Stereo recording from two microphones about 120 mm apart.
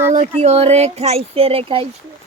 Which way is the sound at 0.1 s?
70° right (ahead or behind).